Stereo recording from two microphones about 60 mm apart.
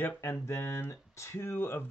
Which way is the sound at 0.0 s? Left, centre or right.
Left.